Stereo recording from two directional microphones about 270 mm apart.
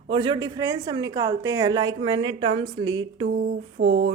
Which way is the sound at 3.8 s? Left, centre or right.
Right.